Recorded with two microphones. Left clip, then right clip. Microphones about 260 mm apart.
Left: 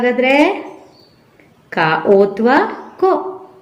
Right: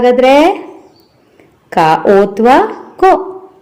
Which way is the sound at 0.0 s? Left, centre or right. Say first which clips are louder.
Right 6 dB; right.